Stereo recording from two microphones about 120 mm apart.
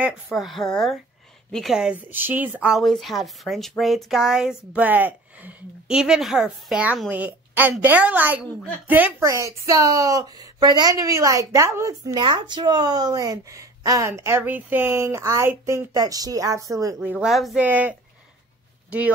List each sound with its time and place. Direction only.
0.3 s speech: centre (ahead or behind)
2.7 s a woman's voice: centre (ahead or behind)
9.2 s a woman's voice: 25° right (ahead or behind)
17.0 s speech: 15° right (ahead or behind)
17.3 s speech: centre (ahead or behind)
17.6 s speech: 15° right (ahead or behind)